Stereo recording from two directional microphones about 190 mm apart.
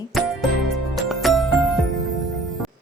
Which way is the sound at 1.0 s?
Centre (ahead or behind).